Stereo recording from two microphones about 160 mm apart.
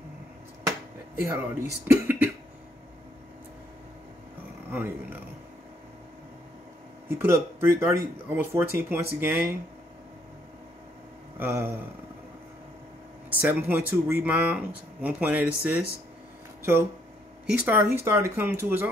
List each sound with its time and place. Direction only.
1.2 s speech: 15° right (ahead or behind)
4.6 s speech: 10° right (ahead or behind)
7.1 s speech: 15° right (ahead or behind)
11.3 s speech: 15° right (ahead or behind)
13.3 s speech: 10° right (ahead or behind)
17.5 s speech: 10° right (ahead or behind)